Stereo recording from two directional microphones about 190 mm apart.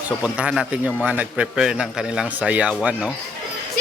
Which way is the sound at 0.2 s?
5° right (ahead or behind).